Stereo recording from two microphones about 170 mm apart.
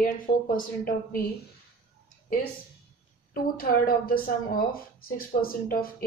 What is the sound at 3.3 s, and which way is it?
Speech, 60° left (ahead or behind).